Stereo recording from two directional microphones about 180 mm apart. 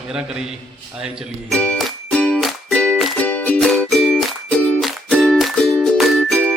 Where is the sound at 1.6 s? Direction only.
5° left (ahead or behind).